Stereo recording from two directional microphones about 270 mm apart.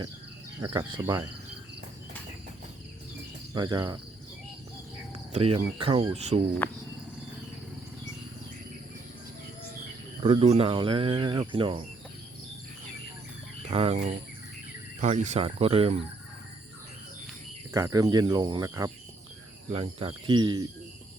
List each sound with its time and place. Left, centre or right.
0.7 s speech: centre
3.5 s speech: centre
5.3 s speech: right
6.6 s cricket: centre
10.2 s speech: right
13.7 s speech: right
17.7 s speech: centre